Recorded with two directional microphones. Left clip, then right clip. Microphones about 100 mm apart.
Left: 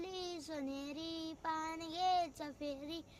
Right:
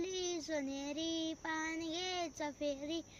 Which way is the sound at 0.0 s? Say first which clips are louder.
Right 5 dB; 45° left (ahead or behind).